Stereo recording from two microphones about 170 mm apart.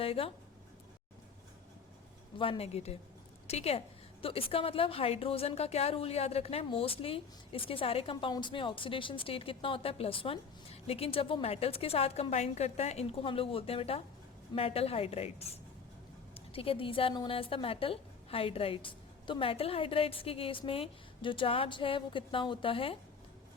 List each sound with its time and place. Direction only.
0.0 s speech: 35° left (ahead or behind)
2.4 s a woman's voice: 35° left (ahead or behind)